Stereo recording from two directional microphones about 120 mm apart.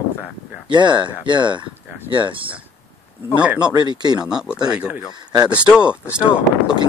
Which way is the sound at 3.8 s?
35° right (ahead or behind).